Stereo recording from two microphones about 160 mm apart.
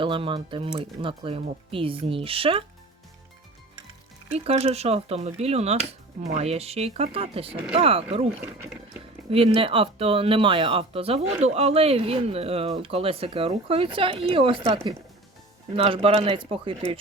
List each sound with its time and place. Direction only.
0.0 s speech: 30° right (ahead or behind)
4.4 s speech: 40° right (ahead or behind)
8.5 s speech: 10° right (ahead or behind)
9.3 s speech: 35° right (ahead or behind)
15.7 s speech: 35° right (ahead or behind)